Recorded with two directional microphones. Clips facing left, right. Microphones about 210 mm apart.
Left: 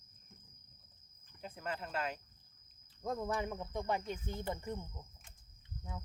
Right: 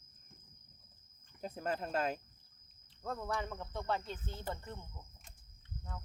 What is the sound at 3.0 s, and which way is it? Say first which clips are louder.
Speech: left 2 dB; 15° left (ahead or behind).